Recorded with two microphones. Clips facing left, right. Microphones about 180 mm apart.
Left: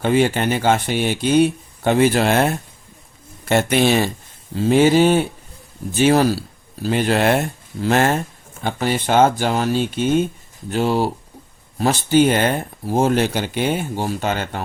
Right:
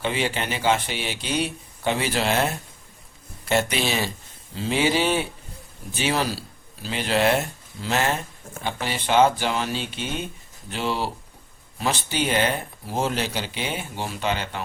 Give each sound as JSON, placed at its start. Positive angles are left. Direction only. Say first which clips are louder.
{"t": 0.0, "sound": "speech", "louder": "left 9 dB", "side_deg": 50}